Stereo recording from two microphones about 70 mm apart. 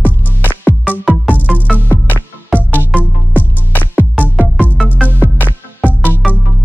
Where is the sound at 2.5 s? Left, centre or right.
Left.